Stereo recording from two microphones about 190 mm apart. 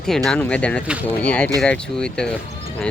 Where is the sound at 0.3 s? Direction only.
5° left (ahead or behind).